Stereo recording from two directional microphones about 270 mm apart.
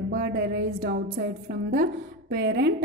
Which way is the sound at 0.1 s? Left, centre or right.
Right.